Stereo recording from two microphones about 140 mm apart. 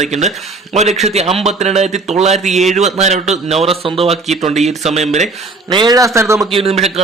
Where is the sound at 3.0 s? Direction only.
55° right (ahead or behind).